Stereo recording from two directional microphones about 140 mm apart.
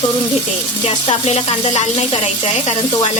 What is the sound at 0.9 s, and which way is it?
Speech, 45° left (ahead or behind).